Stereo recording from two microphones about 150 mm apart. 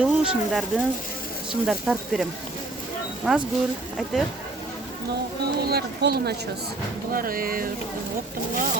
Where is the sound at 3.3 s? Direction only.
5° right (ahead or behind).